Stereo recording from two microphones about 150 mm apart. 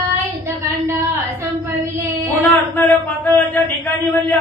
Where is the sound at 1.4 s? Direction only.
20° right (ahead or behind).